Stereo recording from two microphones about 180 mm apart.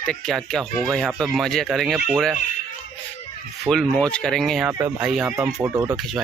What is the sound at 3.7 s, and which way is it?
Speech, 5° left (ahead or behind).